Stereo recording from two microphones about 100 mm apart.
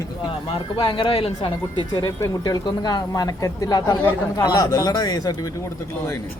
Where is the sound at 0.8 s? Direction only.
60° left (ahead or behind).